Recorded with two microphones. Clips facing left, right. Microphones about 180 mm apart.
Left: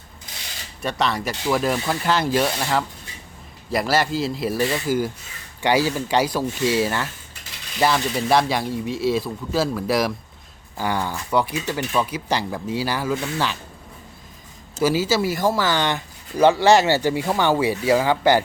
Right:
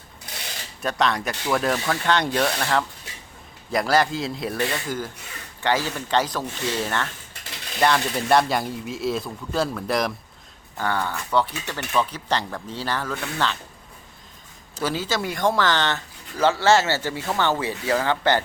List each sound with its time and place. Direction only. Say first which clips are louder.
0.8 s speech: even; centre (ahead or behind)
14.8 s speech: left 6 dB; 10° left (ahead or behind)